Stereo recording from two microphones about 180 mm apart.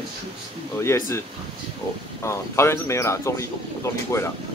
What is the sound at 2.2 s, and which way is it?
Speech, 15° left (ahead or behind).